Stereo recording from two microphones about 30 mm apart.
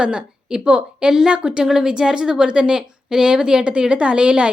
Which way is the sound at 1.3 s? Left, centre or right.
Right.